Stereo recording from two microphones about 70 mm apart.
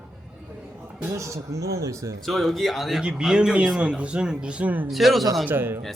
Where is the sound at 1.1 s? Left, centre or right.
Right.